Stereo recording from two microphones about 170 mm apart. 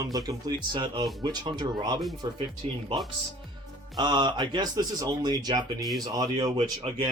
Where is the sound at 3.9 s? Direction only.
25° right (ahead or behind).